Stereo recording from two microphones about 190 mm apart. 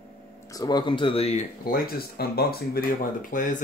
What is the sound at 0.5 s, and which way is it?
Speech, 20° left (ahead or behind).